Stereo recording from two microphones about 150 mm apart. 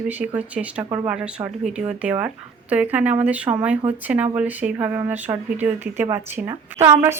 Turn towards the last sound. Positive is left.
turn(degrees=-20)  # may be behind; listen again after turning